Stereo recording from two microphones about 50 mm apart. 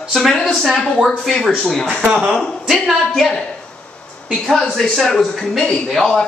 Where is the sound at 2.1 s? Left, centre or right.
Right.